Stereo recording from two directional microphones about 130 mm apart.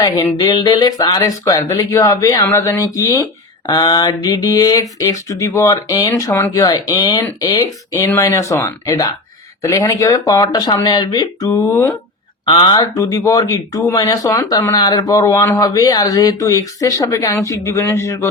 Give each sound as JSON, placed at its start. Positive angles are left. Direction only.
{"t": 0.4, "sound": "speech", "side_deg": 35}
{"t": 12.5, "sound": "speech", "side_deg": 35}